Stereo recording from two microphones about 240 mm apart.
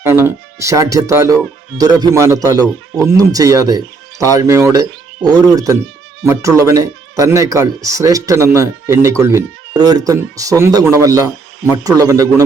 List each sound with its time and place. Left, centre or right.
0.1 s speech: centre